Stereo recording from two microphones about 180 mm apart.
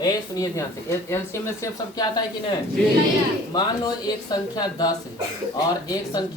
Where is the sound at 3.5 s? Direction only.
20° left (ahead or behind).